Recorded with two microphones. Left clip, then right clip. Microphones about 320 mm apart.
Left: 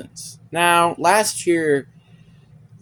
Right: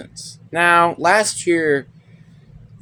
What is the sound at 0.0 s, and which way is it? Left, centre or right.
Speech, left.